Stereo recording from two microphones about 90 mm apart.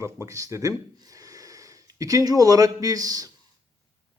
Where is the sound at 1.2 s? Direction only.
40° right (ahead or behind).